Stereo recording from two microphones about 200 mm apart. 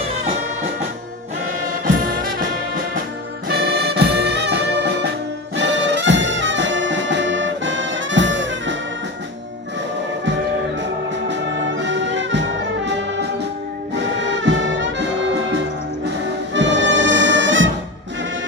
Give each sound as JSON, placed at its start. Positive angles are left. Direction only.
{"t": 3.5, "sound": "brass instrument", "side_deg": -55}
{"t": 11.3, "sound": "brass instrument", "side_deg": -65}
{"t": 14.2, "sound": "brass instrument", "side_deg": -65}
{"t": 16.6, "sound": "music", "side_deg": -65}